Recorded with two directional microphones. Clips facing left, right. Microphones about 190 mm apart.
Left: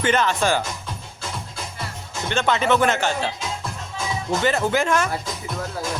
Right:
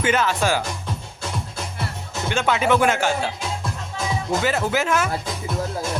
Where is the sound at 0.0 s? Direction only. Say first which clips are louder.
Even; 5° right (ahead or behind).